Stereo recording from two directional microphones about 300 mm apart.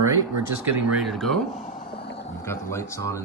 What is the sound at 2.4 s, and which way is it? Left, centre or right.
Speech, centre.